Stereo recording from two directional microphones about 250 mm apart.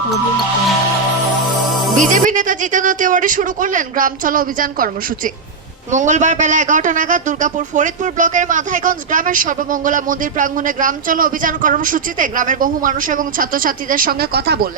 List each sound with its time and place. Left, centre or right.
2.0 s a man's voice: right